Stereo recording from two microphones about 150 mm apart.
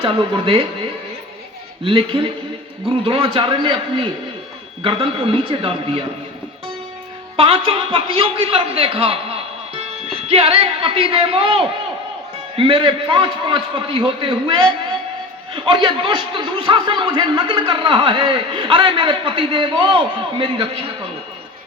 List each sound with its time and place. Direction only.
0.0 s a man's voice: 35° right (ahead or behind)
1.8 s a man's voice: 40° right (ahead or behind)
7.3 s a man's voice: 40° right (ahead or behind)